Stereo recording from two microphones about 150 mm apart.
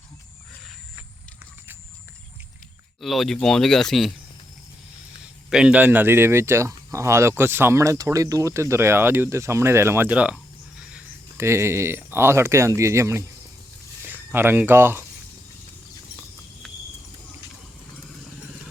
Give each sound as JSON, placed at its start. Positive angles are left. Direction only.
{"t": 3.0, "sound": "speech", "side_deg": 0}
{"t": 5.5, "sound": "speech", "side_deg": -5}
{"t": 11.3, "sound": "speech", "side_deg": -20}
{"t": 16.6, "sound": "cricket", "side_deg": 5}